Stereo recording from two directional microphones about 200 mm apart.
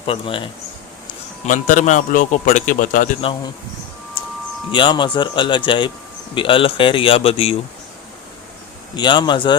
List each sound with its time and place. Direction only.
0.0 s speech: 25° left (ahead or behind)
1.5 s a man's voice: 40° left (ahead or behind)
4.7 s speech: 25° left (ahead or behind)
9.0 s speech: 25° left (ahead or behind)